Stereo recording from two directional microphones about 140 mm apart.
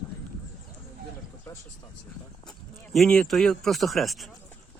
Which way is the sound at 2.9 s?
5° left (ahead or behind).